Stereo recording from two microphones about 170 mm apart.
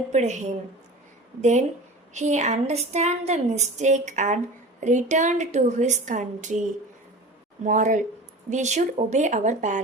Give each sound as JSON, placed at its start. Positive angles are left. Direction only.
{"t": 0.1, "sound": "a woman's voice", "side_deg": -45}